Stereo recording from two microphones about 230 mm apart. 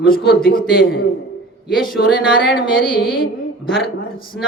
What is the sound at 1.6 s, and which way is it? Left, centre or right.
Speech, centre.